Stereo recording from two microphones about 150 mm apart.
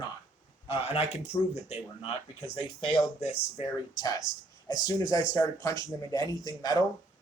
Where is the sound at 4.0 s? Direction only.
25° left (ahead or behind).